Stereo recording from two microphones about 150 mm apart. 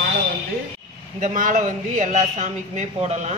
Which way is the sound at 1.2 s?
60° right (ahead or behind).